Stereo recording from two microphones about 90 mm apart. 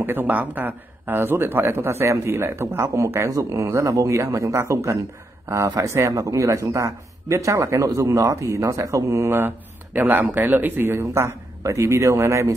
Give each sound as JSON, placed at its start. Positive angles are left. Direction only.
{"t": 0.0, "sound": "a man's voice", "side_deg": -20}
{"t": 9.9, "sound": "speech", "side_deg": -20}